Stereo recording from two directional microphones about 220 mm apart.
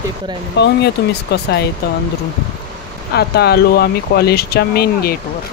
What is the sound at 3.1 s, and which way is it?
Speech, 45° left (ahead or behind).